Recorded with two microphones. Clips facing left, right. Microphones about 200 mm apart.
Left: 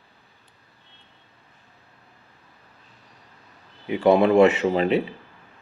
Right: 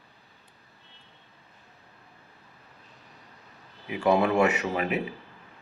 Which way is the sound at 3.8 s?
25° left (ahead or behind).